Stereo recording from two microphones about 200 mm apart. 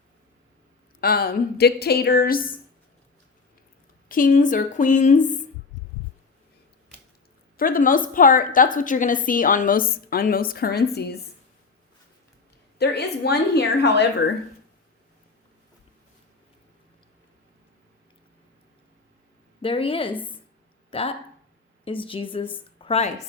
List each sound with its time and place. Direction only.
1.0 s a woman's voice: 50° left (ahead or behind)
4.1 s a woman's voice: 40° left (ahead or behind)
7.5 s a woman's voice: 45° left (ahead or behind)
12.8 s a woman's voice: 55° left (ahead or behind)
19.6 s a woman's voice: 25° left (ahead or behind)